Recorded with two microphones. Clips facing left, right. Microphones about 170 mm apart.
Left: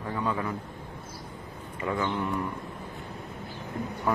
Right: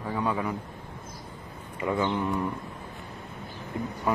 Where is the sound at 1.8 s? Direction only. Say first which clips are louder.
Right 2 dB; 25° right (ahead or behind).